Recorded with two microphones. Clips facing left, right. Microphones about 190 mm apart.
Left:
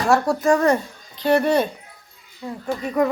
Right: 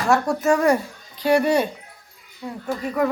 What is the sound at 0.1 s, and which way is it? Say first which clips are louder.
Speech: left 1 dB; 5° right (ahead or behind).